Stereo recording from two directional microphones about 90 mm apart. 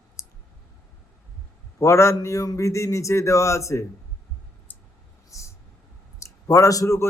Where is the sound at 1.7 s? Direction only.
35° left (ahead or behind).